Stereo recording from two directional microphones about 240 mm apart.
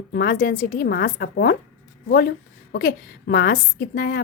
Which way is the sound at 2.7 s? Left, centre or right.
Left.